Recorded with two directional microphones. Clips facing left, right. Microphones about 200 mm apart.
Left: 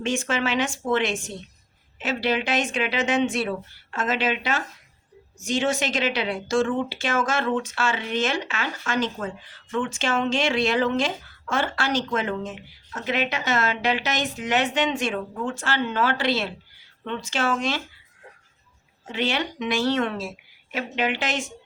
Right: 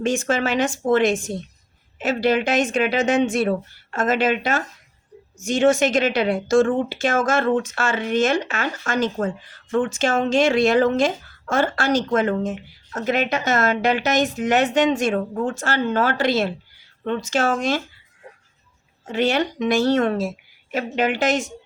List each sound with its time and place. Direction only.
0.0 s speech: 45° right (ahead or behind)
19.0 s speech: 45° right (ahead or behind)